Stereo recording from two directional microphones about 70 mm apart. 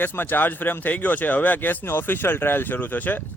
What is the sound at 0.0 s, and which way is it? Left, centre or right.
A man's voice, left.